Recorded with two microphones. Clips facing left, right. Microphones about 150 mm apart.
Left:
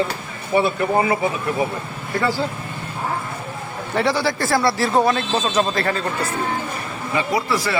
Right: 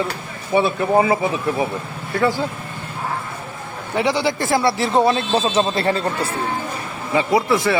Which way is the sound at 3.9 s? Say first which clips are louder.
Right 1 dB; 20° right (ahead or behind).